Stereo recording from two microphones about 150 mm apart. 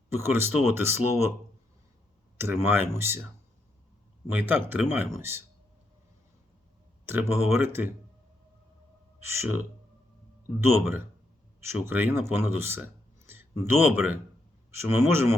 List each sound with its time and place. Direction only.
0.2 s speech: 15° right (ahead or behind)
2.4 s speech: 15° right (ahead or behind)
4.3 s speech: 15° right (ahead or behind)
7.0 s speech: 15° right (ahead or behind)
9.2 s speech: 15° right (ahead or behind)
10.8 s speech: 15° right (ahead or behind)